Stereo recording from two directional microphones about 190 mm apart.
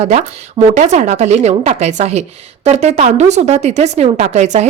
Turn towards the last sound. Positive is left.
turn(degrees=-35)  # may be behind; listen again after turning